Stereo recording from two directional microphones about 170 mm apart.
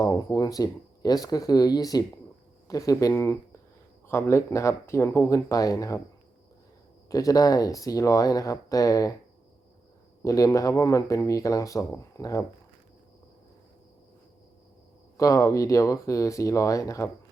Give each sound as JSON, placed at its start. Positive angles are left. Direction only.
{"t": 0.0, "sound": "speech", "side_deg": 20}
{"t": 7.1, "sound": "speech", "side_deg": 20}
{"t": 10.2, "sound": "speech", "side_deg": 20}
{"t": 15.2, "sound": "speech", "side_deg": 20}